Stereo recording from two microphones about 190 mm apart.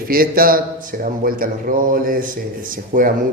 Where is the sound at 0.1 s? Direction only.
50° right (ahead or behind).